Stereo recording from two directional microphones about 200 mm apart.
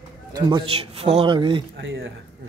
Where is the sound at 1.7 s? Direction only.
70° right (ahead or behind).